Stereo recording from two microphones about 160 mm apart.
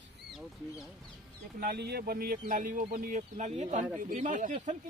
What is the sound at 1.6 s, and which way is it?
Speech, 80° right.